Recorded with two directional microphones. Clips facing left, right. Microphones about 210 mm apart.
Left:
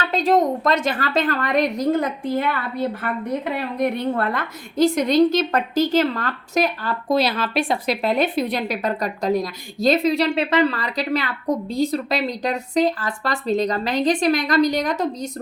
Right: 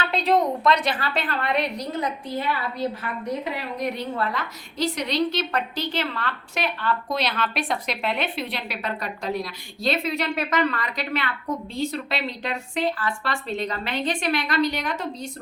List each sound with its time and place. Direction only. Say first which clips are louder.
0.0 s a woman's voice: left 3 dB; 45° left (ahead or behind)